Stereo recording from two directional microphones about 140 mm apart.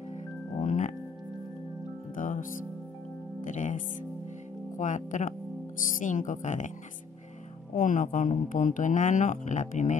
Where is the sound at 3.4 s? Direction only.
60° left (ahead or behind).